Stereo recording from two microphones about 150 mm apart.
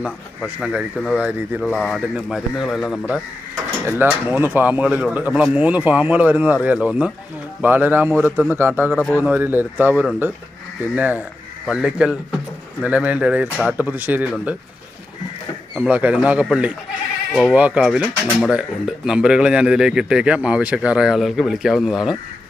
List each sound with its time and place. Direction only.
0.4 s speech: 5° right (ahead or behind)
3.8 s speech: 15° right (ahead or behind)
9.0 s speech: 10° left (ahead or behind)
9.2 s speech: 10° right (ahead or behind)
15.9 s speech: 10° right (ahead or behind)